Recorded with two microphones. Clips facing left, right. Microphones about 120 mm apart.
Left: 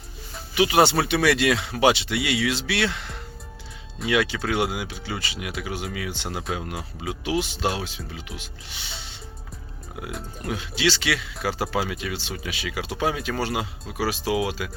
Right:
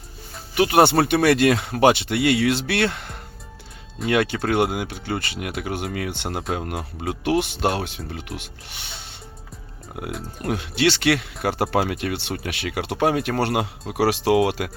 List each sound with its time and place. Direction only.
0.5 s speech: 50° right (ahead or behind)
10.4 s speech: 60° right (ahead or behind)